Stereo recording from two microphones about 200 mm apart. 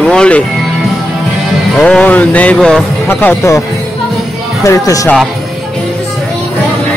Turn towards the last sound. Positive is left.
turn(degrees=15)  # may be behind; listen again after turning